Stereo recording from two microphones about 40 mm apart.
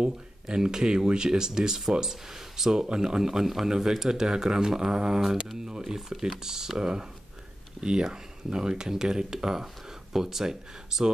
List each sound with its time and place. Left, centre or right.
0.0 s speech: centre